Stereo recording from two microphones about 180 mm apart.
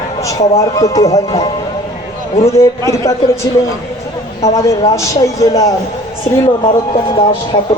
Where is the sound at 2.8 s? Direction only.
15° left (ahead or behind).